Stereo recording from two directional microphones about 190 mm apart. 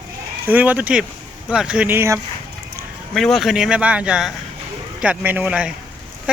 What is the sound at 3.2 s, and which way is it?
Speech, centre (ahead or behind).